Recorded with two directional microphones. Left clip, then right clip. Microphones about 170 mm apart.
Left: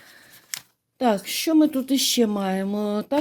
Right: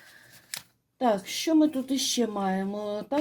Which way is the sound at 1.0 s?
50° left (ahead or behind).